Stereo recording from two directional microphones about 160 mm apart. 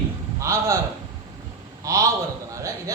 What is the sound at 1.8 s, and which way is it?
Speech, 20° right (ahead or behind).